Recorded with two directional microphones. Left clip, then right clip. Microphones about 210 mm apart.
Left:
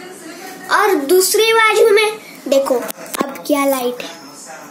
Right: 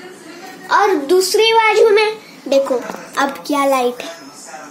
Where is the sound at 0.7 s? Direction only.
Centre (ahead or behind); by 4.1 s 15° right (ahead or behind).